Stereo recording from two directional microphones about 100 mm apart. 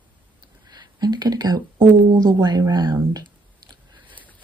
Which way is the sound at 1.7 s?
50° right (ahead or behind).